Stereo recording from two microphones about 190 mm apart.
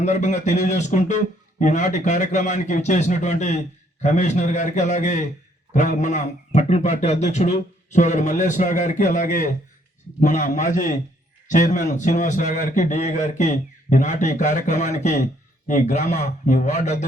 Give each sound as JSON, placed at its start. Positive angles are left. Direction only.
{"t": 0.0, "sound": "a man's voice", "side_deg": 40}